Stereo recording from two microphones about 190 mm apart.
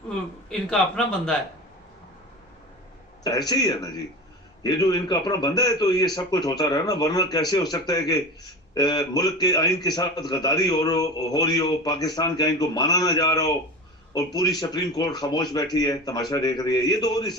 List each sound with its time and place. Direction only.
0.7 s a man's voice: 5° left (ahead or behind)
3.2 s a man's voice: 20° left (ahead or behind)